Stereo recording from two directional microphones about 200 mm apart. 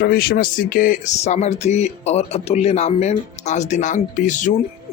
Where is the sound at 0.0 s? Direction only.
50° left (ahead or behind).